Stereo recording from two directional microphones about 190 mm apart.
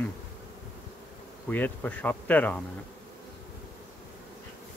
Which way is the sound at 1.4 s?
10° left (ahead or behind).